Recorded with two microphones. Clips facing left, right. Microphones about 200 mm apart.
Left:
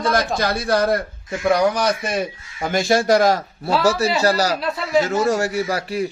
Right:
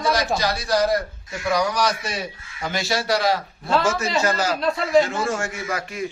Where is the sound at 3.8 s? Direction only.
35° left (ahead or behind).